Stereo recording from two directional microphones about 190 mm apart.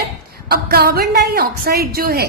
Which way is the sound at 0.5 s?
55° right (ahead or behind).